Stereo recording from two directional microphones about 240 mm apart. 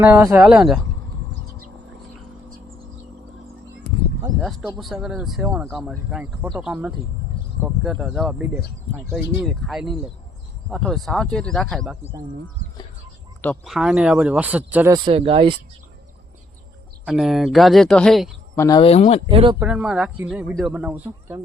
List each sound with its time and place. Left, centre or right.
0.0 s speech: centre
4.2 s speech: centre
9.5 s speech: centre
13.4 s speech: centre
14.9 s speech: right
17.1 s speech: centre
18.5 s speech: centre
19.3 s speech: right
19.5 s speech: centre